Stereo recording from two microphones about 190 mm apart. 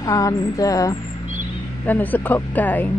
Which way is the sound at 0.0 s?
15° left (ahead or behind).